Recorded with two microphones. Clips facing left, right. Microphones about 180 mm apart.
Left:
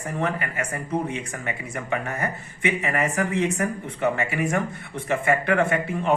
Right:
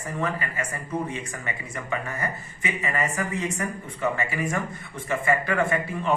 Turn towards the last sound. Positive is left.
turn(degrees=65)  # may be behind; listen again after turning